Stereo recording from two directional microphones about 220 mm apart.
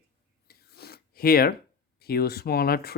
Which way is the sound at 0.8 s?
45° left (ahead or behind).